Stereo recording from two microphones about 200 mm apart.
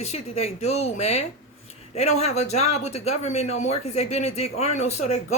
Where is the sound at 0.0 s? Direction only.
30° left (ahead or behind).